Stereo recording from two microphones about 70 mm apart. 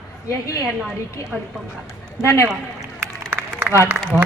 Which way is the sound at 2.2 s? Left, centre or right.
Left.